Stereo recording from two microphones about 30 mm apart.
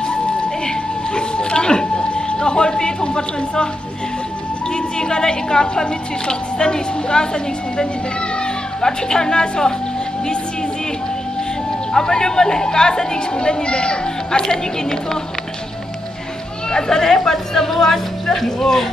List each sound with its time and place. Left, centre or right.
0.0 s music: left
4.7 s a woman's voice: left
11.9 s a woman's voice: left
14.4 s speech: centre
16.7 s speech: left